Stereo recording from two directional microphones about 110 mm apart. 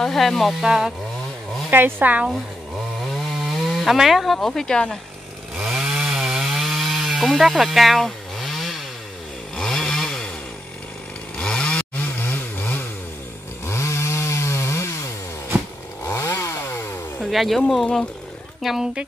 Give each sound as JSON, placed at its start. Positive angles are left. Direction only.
{"t": 0.0, "sound": "speech", "side_deg": 5}
{"t": 1.7, "sound": "speech", "side_deg": -20}
{"t": 3.7, "sound": "speech", "side_deg": 0}
{"t": 5.6, "sound": "chainsaw", "side_deg": -5}
{"t": 11.3, "sound": "chainsaw", "side_deg": 10}
{"t": 16.3, "sound": "chainsaw", "side_deg": 25}
{"t": 17.2, "sound": "speech", "side_deg": 0}